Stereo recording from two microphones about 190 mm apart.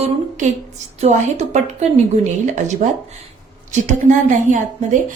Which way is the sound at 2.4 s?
40° right (ahead or behind).